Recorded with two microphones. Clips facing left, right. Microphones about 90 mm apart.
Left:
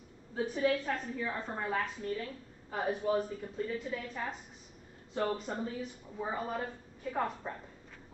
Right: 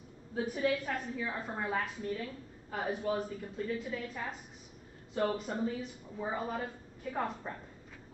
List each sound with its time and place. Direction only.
0.4 s a woman's voice: 5° right (ahead or behind)